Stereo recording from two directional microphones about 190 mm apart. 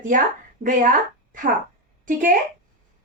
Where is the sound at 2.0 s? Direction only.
45° right (ahead or behind).